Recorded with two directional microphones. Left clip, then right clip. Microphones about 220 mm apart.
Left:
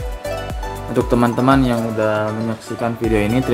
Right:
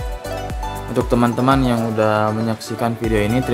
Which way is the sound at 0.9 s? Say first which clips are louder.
Left 1 dB; 10° right (ahead or behind).